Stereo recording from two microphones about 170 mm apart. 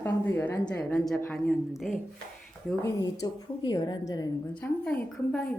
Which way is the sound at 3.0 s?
25° left (ahead or behind).